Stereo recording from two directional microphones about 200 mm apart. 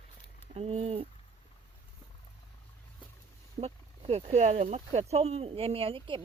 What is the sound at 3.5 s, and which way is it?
Speech, 30° right (ahead or behind).